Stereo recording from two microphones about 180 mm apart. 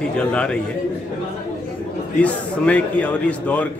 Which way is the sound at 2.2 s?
5° left (ahead or behind).